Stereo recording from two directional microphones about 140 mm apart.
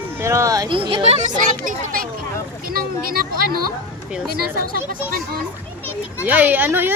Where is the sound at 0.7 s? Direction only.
40° right (ahead or behind).